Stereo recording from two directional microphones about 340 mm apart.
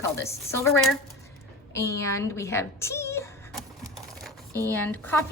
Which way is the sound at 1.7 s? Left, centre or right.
Centre.